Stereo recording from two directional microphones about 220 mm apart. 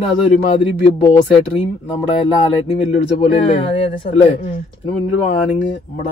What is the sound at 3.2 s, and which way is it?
Speech, 25° left (ahead or behind).